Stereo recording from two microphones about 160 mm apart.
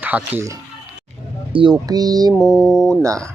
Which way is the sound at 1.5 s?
25° right (ahead or behind).